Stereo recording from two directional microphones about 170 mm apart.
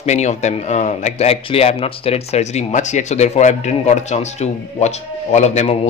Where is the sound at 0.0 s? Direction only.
40° left (ahead or behind).